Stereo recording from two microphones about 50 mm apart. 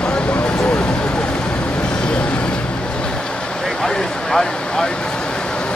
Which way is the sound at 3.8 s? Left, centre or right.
Centre.